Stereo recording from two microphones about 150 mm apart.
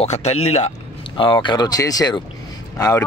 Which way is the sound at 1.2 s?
35° left (ahead or behind).